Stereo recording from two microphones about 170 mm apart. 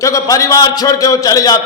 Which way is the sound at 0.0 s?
20° left (ahead or behind).